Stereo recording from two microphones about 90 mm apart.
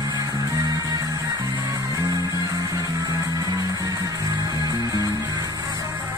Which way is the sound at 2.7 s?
40° right (ahead or behind).